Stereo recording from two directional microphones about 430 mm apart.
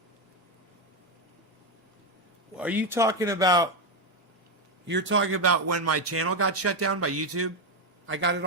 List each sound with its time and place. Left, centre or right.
2.6 s speech: centre
4.9 s a man's voice: right